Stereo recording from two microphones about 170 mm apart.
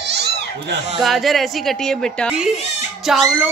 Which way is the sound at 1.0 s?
Centre (ahead or behind).